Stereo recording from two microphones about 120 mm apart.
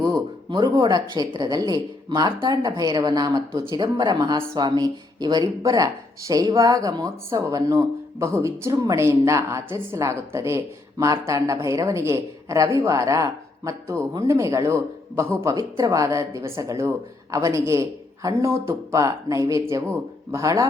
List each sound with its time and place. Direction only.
0.0 s speech: 35° right (ahead or behind)